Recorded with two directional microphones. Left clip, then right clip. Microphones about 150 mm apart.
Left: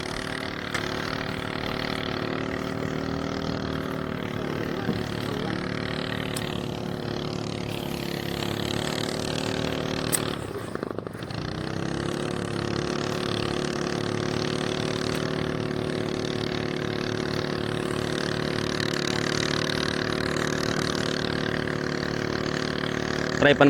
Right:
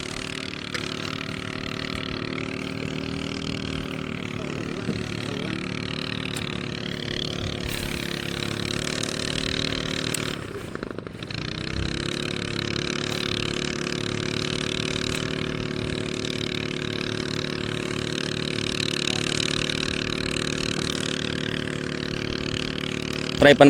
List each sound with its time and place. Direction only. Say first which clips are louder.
19.4 s vehicle: even; 25° right (ahead or behind)
23.4 s speech: right 5 dB; 65° right (ahead or behind)